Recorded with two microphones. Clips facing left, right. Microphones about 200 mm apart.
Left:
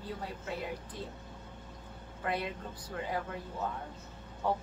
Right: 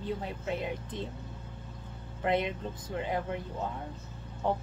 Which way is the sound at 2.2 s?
20° right (ahead or behind).